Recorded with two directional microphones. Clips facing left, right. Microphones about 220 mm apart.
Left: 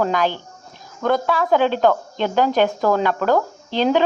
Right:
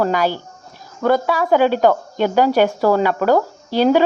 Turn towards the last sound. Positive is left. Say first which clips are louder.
# right 3 dB
turn(degrees=-10)  # may be behind; listen again after turning